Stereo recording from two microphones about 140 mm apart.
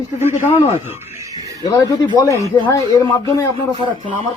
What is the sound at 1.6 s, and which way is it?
Speech, 25° left (ahead or behind).